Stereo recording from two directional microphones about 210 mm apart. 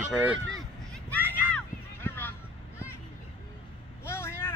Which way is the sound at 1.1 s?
10° left (ahead or behind).